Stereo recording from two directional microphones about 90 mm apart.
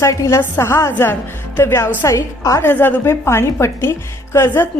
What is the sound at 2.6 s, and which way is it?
A woman's voice, 25° left (ahead or behind).